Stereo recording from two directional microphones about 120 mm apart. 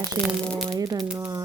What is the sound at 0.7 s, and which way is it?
Speech, 30° right (ahead or behind).